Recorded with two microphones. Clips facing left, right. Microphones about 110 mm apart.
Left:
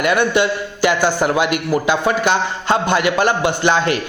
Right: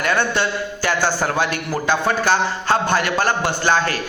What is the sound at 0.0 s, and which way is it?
A man's voice, 15° left (ahead or behind).